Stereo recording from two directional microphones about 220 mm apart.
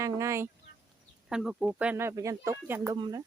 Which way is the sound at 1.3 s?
5° right (ahead or behind).